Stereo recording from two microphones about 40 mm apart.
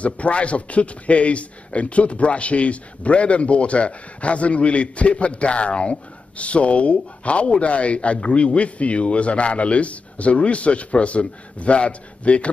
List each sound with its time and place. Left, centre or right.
0.0 s a man's voice: left